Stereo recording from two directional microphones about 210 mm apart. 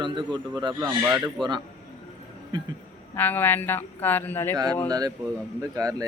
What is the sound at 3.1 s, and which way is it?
Speech, 10° left (ahead or behind).